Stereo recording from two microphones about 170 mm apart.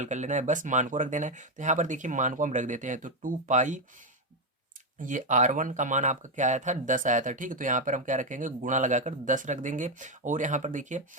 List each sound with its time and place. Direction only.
0.0 s speech: 45° right (ahead or behind)
4.9 s speech: 50° right (ahead or behind)